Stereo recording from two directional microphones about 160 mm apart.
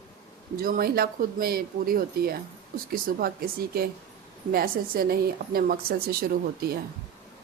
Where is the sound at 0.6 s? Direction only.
65° right (ahead or behind).